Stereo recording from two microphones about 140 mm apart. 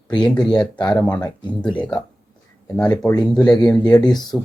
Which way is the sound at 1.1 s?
30° left (ahead or behind).